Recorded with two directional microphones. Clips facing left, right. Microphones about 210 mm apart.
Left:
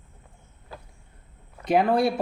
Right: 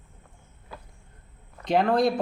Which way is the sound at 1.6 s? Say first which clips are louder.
Left 1 dB; 5° left (ahead or behind).